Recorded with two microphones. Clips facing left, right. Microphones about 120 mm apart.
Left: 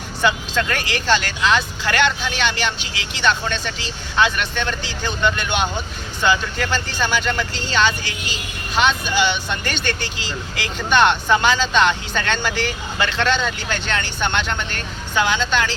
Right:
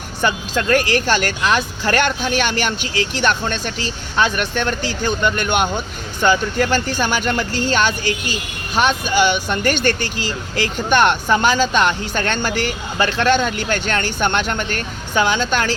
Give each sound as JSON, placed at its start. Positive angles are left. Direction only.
{"t": 0.2, "sound": "speech", "side_deg": -45}